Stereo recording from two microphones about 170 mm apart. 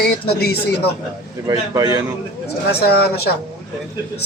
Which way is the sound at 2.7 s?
70° left (ahead or behind).